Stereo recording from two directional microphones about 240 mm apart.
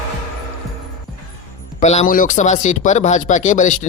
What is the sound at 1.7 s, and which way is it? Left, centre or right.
Speech, left.